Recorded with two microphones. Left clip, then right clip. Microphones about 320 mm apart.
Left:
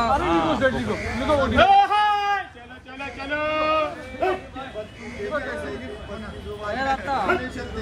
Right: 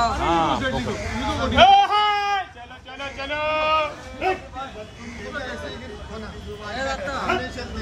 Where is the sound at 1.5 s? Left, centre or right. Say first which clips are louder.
Right 3 dB; centre.